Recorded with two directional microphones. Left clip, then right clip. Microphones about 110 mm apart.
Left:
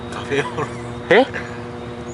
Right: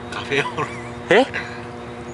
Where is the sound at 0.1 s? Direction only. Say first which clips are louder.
Even; 15° right (ahead or behind).